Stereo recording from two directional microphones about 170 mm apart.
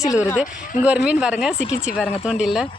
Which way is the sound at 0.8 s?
5° right (ahead or behind).